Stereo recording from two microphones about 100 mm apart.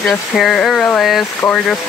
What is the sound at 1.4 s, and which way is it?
Speech, 25° left (ahead or behind).